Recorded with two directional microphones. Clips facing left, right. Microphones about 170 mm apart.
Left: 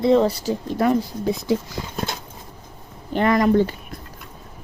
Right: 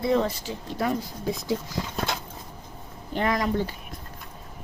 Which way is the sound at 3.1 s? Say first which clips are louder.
Left 7 dB; 60° left (ahead or behind).